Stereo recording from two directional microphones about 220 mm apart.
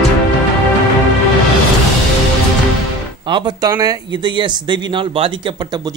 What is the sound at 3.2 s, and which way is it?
Speech, 20° right (ahead or behind).